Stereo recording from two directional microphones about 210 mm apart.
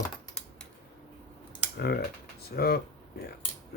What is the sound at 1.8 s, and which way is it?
Speech, 50° left (ahead or behind).